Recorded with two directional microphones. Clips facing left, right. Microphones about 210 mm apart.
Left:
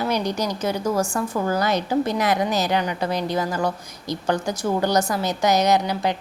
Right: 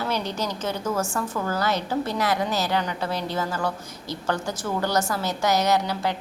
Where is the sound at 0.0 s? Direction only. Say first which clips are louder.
Left 4 dB; 15° left (ahead or behind).